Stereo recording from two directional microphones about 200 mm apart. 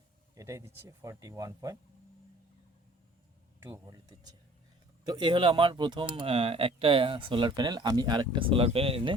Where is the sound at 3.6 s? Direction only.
15° right (ahead or behind).